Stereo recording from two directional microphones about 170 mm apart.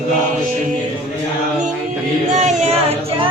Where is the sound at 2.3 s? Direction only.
45° right (ahead or behind).